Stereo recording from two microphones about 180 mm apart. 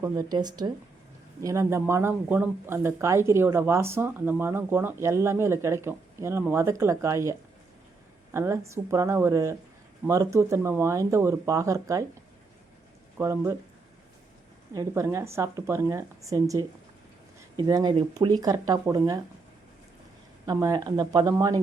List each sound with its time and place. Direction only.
0.0 s speech: 20° right (ahead or behind)
13.1 s speech: 10° right (ahead or behind)
14.7 s speech: 20° right (ahead or behind)
20.5 s speech: 20° right (ahead or behind)